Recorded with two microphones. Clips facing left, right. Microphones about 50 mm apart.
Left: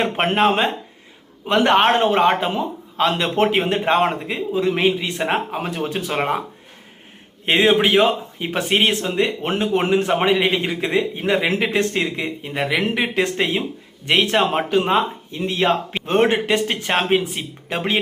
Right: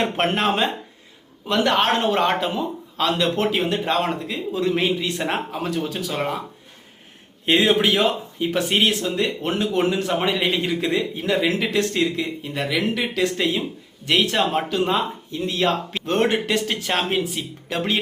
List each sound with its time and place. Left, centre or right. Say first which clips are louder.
0.0 s a man's voice: left 3 dB; centre
7.4 s a man's voice: left 2 dB; left